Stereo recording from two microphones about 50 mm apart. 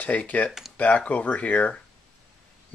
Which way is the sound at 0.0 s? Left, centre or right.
Left.